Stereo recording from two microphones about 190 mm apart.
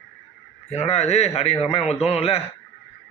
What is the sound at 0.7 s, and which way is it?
Speech, 35° left (ahead or behind).